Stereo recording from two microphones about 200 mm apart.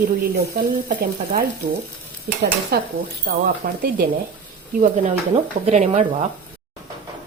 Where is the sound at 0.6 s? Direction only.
45° right (ahead or behind).